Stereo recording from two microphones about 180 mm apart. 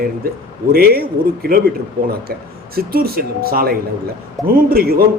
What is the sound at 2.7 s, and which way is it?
A man's voice, 55° right (ahead or behind).